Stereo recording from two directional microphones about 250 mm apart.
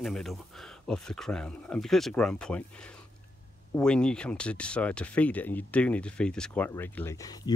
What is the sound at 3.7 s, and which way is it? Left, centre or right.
Speech, centre.